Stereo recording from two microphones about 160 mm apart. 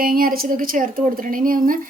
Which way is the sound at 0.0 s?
65° right (ahead or behind).